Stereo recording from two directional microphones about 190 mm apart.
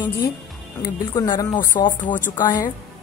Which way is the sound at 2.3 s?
20° left (ahead or behind).